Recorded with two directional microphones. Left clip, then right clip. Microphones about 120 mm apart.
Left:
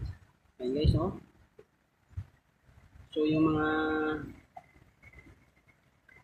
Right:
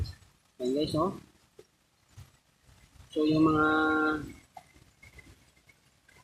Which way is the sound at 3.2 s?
50° right (ahead or behind).